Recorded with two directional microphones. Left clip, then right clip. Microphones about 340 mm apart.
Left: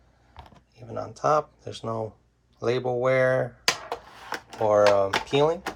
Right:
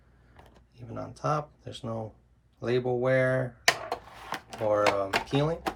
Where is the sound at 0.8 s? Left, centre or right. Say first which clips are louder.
Left 7 dB; centre.